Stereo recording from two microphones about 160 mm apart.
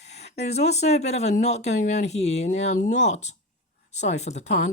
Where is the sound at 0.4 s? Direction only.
45° left (ahead or behind).